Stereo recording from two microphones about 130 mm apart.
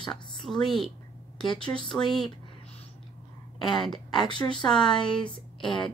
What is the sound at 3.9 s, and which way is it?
Speech, 35° left (ahead or behind).